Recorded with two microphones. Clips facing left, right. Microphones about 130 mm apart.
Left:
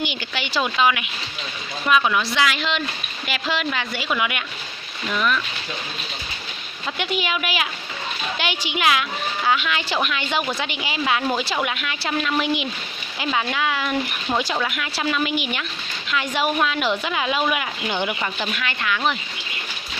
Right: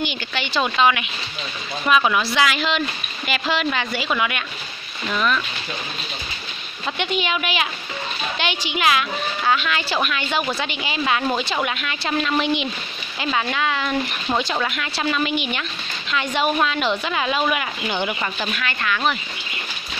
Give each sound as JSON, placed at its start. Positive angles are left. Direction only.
{"t": 0.0, "sound": "a woman's voice", "side_deg": 15}
{"t": 1.9, "sound": "a woman's voice", "side_deg": -5}
{"t": 4.2, "sound": "speech", "side_deg": 15}
{"t": 7.0, "sound": "speech", "side_deg": 5}